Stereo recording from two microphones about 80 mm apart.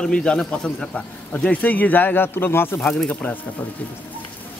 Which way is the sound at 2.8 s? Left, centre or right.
Centre.